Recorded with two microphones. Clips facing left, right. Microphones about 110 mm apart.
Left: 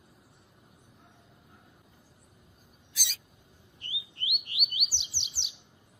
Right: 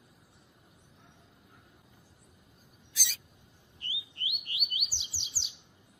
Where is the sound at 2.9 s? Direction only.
15° left (ahead or behind).